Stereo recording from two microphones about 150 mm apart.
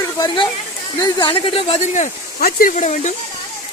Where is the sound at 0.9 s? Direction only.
25° left (ahead or behind); by 2.0 s 50° left (ahead or behind).